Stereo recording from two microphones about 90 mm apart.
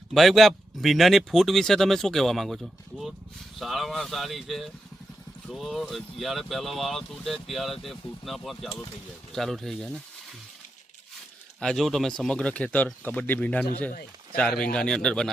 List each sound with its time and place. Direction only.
0.1 s speech: centre (ahead or behind)
11.6 s speech: 5° left (ahead or behind)